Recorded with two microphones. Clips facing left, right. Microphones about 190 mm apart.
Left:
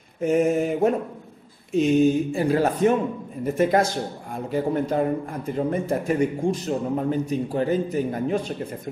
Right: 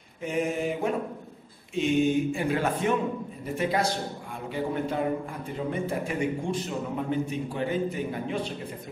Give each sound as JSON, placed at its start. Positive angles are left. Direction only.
{"t": 0.2, "sound": "mantra", "side_deg": 45}
{"t": 1.7, "sound": "a man's voice", "side_deg": 40}
{"t": 3.5, "sound": "mantra", "side_deg": 45}
{"t": 4.5, "sound": "a man's voice", "side_deg": 40}